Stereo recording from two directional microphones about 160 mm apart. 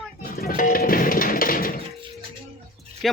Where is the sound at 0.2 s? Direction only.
65° left (ahead or behind).